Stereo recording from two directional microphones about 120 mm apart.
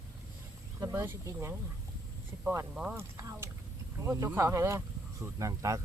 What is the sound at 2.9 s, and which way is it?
Speech, 25° right (ahead or behind).